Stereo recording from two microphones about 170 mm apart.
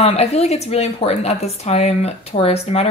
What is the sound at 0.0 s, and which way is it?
Speech, 40° left (ahead or behind).